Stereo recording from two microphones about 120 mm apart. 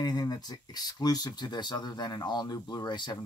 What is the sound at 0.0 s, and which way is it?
Speech, 35° left (ahead or behind).